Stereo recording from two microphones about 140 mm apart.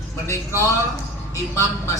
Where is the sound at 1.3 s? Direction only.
20° left (ahead or behind).